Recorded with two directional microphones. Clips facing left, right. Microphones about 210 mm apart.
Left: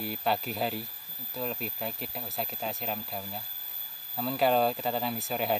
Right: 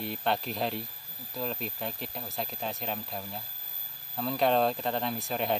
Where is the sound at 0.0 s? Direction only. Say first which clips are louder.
Even; 5° left (ahead or behind).